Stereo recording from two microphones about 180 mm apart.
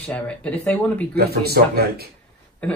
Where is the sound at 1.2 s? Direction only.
60° right (ahead or behind).